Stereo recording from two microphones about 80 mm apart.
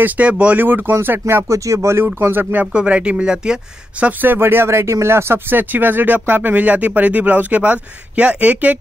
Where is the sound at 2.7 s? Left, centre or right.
Centre.